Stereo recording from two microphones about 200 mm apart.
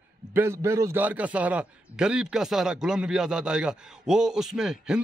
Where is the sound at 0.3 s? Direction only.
10° right (ahead or behind).